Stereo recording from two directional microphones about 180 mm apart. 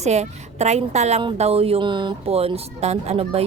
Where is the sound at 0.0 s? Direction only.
40° right (ahead or behind).